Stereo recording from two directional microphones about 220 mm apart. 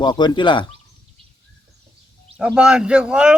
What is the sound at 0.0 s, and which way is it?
Speech, 20° left (ahead or behind).